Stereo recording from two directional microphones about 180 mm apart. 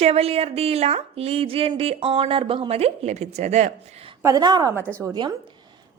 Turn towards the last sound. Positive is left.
turn(degrees=-20)  # may be behind; listen again after turning